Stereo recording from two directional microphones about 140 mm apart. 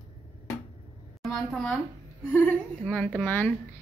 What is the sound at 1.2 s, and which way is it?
A woman's voice, 5° left (ahead or behind).